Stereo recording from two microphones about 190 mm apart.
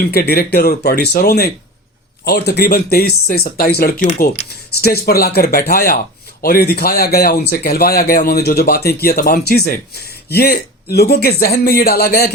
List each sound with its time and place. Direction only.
0.0 s speech: 55° left (ahead or behind)